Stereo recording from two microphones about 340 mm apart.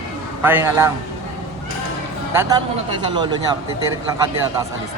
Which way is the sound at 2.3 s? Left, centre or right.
Centre.